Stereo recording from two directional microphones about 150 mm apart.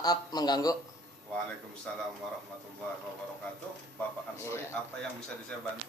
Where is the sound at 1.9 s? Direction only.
5° left (ahead or behind).